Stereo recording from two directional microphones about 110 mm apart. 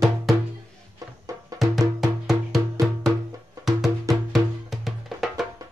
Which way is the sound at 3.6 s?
Centre (ahead or behind).